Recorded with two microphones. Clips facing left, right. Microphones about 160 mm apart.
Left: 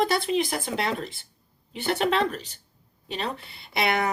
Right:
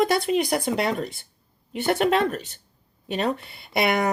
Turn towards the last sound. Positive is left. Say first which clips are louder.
# right 3 dB
turn(degrees=-50)  # may be behind; listen again after turning